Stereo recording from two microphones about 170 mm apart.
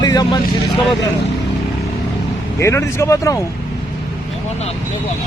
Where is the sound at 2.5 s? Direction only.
15° left (ahead or behind).